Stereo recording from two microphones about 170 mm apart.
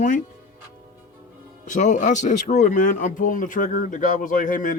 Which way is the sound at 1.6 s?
45° left (ahead or behind).